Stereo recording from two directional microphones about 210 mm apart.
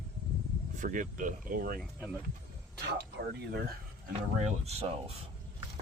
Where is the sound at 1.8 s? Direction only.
Centre (ahead or behind).